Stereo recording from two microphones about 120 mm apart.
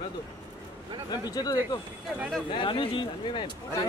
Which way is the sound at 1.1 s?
35° left (ahead or behind).